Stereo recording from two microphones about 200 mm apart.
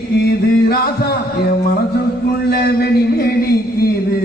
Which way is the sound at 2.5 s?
55° left (ahead or behind).